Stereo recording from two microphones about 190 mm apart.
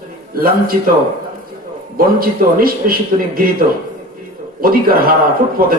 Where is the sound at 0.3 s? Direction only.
50° right (ahead or behind).